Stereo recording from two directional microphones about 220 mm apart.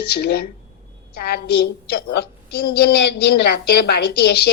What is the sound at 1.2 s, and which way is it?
A woman's voice, 45° left (ahead or behind).